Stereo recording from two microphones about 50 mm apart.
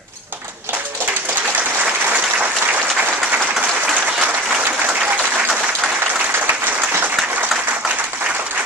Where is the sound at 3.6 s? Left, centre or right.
Right.